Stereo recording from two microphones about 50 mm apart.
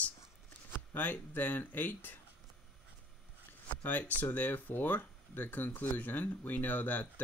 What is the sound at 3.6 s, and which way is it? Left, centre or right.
Speech, left.